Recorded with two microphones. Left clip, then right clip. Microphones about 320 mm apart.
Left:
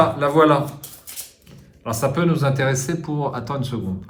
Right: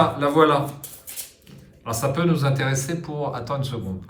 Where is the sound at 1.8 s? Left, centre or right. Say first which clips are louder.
Left 3 dB; centre.